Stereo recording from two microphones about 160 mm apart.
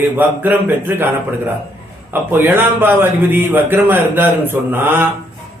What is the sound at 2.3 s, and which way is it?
Speech, 10° right (ahead or behind).